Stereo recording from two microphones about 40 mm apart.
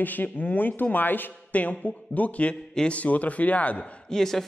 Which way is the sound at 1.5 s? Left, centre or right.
Left.